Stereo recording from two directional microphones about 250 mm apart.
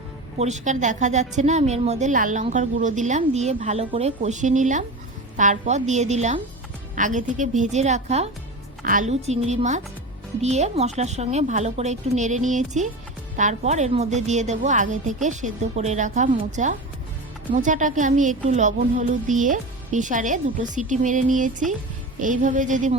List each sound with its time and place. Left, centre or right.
0.3 s a woman's voice: right